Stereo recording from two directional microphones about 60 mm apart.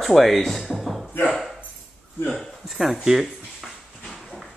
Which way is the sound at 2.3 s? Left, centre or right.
Centre.